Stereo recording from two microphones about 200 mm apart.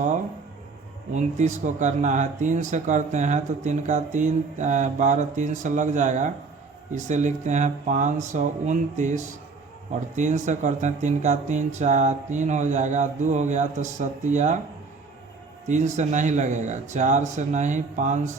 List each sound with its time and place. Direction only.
1.1 s speech: 35° right (ahead or behind)
15.6 s speech: 35° right (ahead or behind)